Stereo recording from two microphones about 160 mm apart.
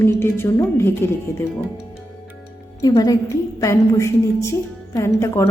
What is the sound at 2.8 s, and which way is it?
A woman's voice, 20° left (ahead or behind).